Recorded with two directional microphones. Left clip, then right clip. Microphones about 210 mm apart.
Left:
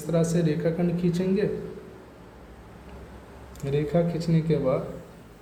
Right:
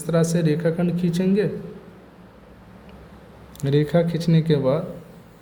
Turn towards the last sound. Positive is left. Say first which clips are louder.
# right 4 dB
turn(degrees=-40)  # may be behind; listen again after turning